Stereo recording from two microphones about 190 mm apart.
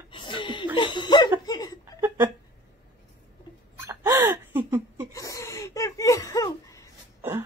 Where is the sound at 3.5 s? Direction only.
25° left (ahead or behind).